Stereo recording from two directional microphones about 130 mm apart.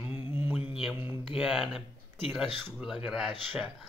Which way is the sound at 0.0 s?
15° right (ahead or behind).